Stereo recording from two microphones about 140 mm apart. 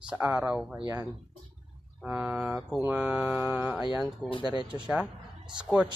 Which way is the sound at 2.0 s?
5° right (ahead or behind).